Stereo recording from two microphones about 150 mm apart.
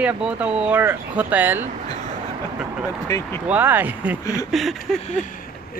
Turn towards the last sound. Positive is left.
turn(degrees=0)  # may be behind; listen again after turning